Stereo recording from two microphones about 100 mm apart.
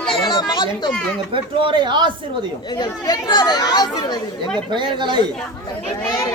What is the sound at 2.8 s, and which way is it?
Speech, 45° left (ahead or behind).